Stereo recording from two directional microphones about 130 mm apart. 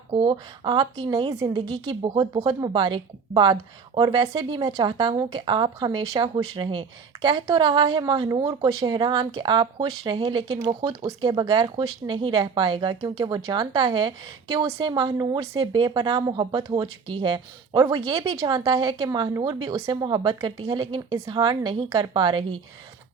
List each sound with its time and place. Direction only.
0.1 s a woman's voice: 35° right (ahead or behind)